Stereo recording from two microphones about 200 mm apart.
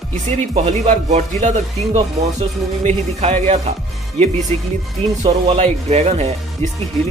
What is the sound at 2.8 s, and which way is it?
Speech, 35° right (ahead or behind).